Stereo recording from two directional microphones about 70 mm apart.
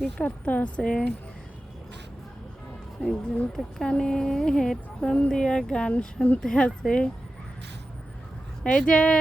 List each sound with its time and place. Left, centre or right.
0.2 s a woman's voice: left
3.0 s speech: centre
8.6 s speech: centre